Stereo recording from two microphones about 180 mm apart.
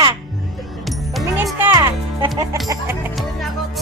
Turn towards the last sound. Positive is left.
turn(degrees=0)  # may be behind; listen again after turning